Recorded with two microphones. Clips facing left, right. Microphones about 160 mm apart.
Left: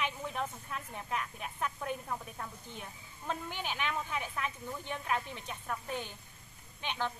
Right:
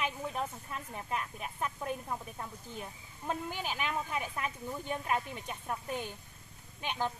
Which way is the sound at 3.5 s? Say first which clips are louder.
Right 1 dB; 40° right (ahead or behind).